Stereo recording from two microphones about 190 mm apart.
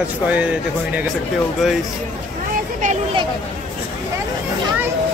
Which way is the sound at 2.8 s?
45° right (ahead or behind).